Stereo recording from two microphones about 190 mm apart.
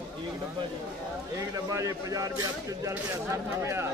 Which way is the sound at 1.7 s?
15° right (ahead or behind).